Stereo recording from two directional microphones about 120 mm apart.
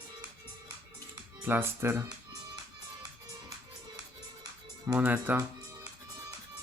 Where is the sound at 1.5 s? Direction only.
20° right (ahead or behind).